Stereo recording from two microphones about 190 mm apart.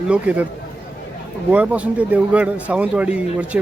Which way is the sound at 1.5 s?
5° right (ahead or behind).